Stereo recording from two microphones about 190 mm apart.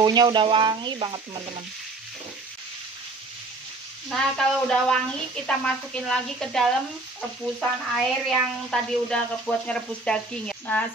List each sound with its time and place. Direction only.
0.0 s speech: 20° right (ahead or behind)
4.1 s speech: 5° left (ahead or behind)